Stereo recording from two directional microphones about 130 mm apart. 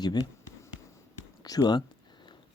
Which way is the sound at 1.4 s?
30° left (ahead or behind).